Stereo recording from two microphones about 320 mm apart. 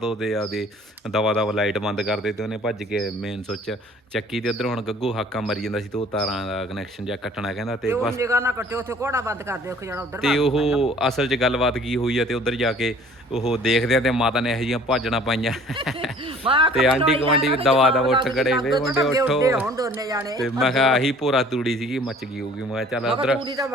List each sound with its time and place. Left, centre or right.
0.0 s speech: centre
4.4 s a man's voice: centre
16.5 s a man's voice: centre
16.7 s speech: centre
17.0 s a man's voice: centre
17.7 s a man's voice: centre
20.4 s a man's voice: centre